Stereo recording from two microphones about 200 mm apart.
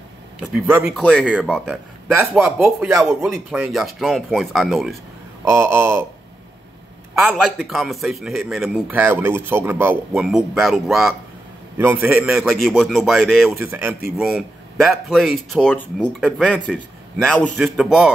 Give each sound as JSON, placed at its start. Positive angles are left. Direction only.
{"t": 0.6, "sound": "a man's voice", "side_deg": -10}
{"t": 5.4, "sound": "speech", "side_deg": -15}
{"t": 7.2, "sound": "a man's voice", "side_deg": -5}